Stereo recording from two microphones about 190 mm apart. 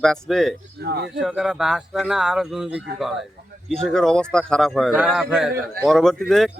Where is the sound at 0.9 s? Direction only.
60° right (ahead or behind).